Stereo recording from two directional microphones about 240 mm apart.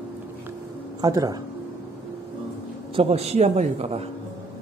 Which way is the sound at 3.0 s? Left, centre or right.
Right.